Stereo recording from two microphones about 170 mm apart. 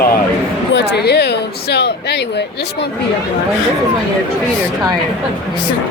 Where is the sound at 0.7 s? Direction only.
75° left (ahead or behind).